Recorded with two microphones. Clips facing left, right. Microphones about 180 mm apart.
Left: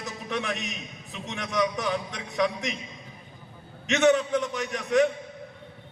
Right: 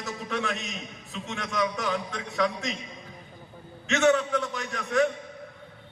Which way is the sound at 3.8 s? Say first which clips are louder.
Left 1 dB; 20° left (ahead or behind).